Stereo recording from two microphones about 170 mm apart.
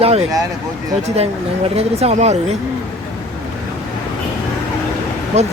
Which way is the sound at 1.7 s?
40° right (ahead or behind).